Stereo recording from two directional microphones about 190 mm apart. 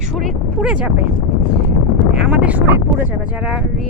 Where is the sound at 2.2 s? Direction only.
5° right (ahead or behind).